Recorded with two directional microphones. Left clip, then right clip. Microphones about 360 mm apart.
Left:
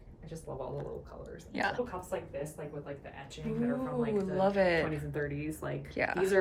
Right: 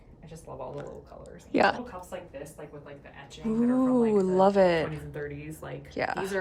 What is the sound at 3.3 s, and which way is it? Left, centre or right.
Speech, centre.